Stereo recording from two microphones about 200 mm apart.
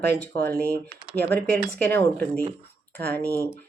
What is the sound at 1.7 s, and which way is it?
Speech, 10° left (ahead or behind).